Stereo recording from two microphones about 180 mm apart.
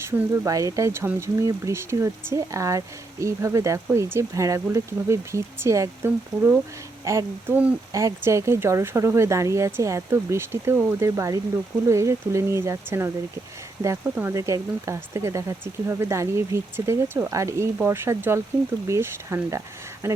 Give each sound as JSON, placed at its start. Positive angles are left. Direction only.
{"t": 0.0, "sound": "speech", "side_deg": -15}